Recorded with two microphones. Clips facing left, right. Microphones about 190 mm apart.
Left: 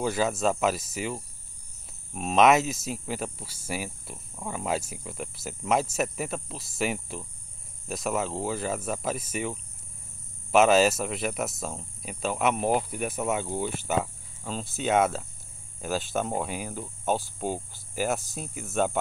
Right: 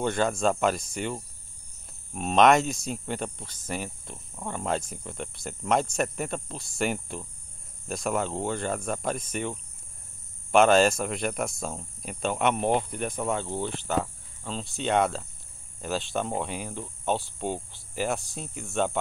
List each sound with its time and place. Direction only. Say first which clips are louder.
0.0 s speech: right 1 dB; 5° left (ahead or behind)